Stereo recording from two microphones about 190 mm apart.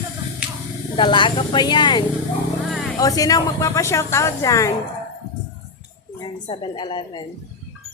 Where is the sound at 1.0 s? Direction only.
25° left (ahead or behind).